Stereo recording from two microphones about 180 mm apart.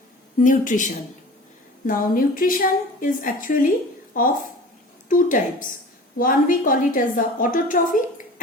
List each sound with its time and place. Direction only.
0.3 s a woman's voice: 45° left (ahead or behind)